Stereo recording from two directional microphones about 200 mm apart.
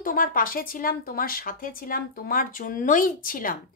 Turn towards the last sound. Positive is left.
turn(degrees=45)  # may be behind; listen again after turning